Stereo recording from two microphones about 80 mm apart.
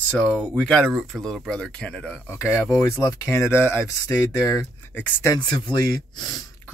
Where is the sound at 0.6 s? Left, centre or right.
Centre.